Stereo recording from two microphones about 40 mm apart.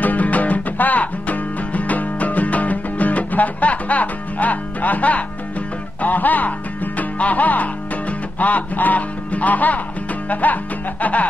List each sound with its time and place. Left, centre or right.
0.0 s music: left